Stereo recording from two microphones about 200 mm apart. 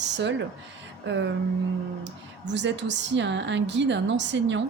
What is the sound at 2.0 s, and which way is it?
A woman's voice, 60° right (ahead or behind).